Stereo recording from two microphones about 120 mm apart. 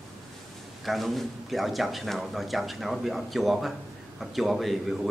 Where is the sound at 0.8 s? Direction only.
Centre (ahead or behind).